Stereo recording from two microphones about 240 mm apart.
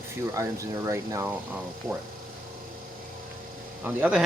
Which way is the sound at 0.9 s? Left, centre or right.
Centre.